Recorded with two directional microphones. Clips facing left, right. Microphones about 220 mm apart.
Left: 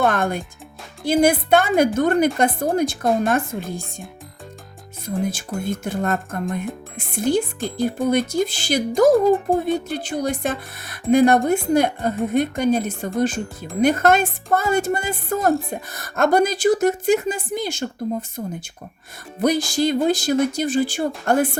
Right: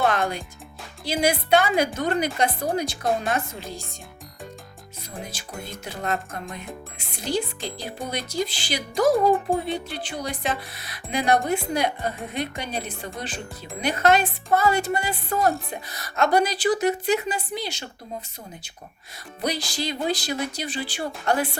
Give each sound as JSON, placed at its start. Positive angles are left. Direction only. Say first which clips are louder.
{"t": 0.0, "sound": "music", "louder": "left 3 dB", "side_deg": 50}
{"t": 1.0, "sound": "speech", "louder": "left 7 dB", "side_deg": 50}
{"t": 5.0, "sound": "speech", "louder": "left 13 dB", "side_deg": 50}
{"t": 19.4, "sound": "speech", "louder": "left 9 dB", "side_deg": 50}